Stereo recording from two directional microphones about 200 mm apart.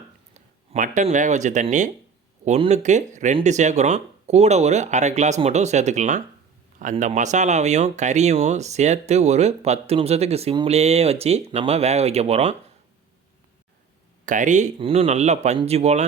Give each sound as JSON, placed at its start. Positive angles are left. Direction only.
{"t": 0.3, "sound": "speech", "side_deg": -35}
{"t": 14.3, "sound": "speech", "side_deg": -40}